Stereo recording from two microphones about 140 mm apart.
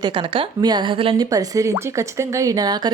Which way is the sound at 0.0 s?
35° right (ahead or behind).